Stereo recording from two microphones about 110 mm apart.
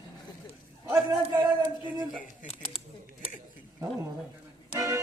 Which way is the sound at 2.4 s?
70° left (ahead or behind).